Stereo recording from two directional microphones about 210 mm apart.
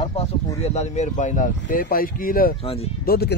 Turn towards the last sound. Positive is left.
turn(degrees=50)  # may be behind; listen again after turning